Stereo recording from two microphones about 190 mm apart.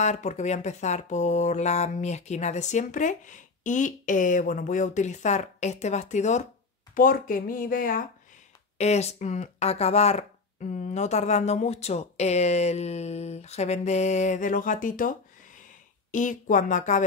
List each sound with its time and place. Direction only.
0.0 s speech: 40° left (ahead or behind)
8.7 s speech: 35° left (ahead or behind)